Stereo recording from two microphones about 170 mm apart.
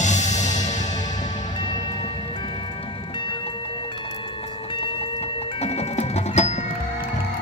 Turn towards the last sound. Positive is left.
turn(degrees=40)  # may be behind; listen again after turning